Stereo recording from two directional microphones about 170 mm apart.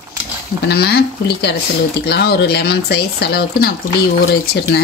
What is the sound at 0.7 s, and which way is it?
Speech, 70° left (ahead or behind).